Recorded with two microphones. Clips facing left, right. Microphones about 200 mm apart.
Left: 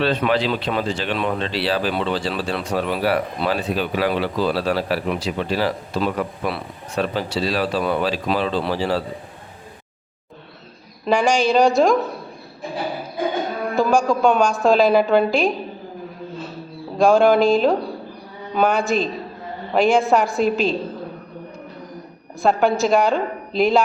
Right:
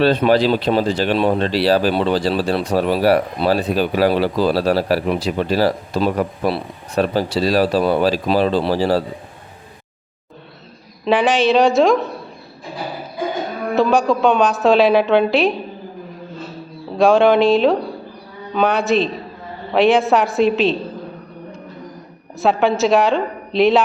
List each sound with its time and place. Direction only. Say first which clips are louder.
0.0 s speech: right 5 dB; 35° right (ahead or behind)
11.0 s a woman's voice: right 2 dB; centre (ahead or behind)
13.7 s a woman's voice: right 3 dB; centre (ahead or behind)
17.0 s a woman's voice: right 2 dB; centre (ahead or behind)
22.4 s a woman's voice: right 2 dB; centre (ahead or behind)